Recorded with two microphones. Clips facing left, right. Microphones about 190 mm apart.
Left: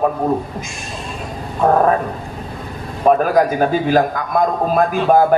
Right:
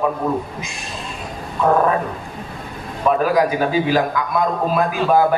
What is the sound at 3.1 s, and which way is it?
A man's voice, 45° left (ahead or behind).